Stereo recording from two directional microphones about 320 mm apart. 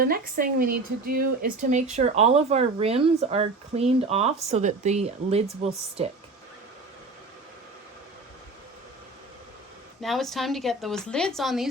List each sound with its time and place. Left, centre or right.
0.0 s speech: right
10.0 s a woman's voice: centre